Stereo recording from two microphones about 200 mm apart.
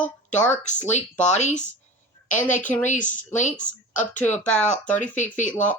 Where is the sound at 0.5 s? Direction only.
35° left (ahead or behind).